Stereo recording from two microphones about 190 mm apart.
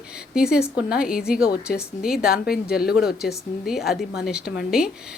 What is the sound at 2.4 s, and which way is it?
Speech, 55° left (ahead or behind).